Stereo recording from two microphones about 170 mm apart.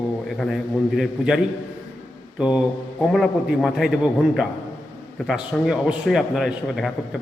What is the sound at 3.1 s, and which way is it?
A man's voice, centre (ahead or behind).